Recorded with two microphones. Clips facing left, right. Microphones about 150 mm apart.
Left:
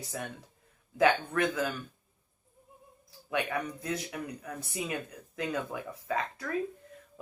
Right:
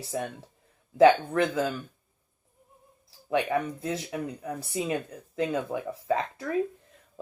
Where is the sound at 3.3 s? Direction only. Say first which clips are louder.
Right 6 dB; 30° right (ahead or behind).